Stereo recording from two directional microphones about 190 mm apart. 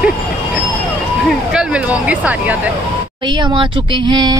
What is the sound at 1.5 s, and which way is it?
Speech, 5° right (ahead or behind).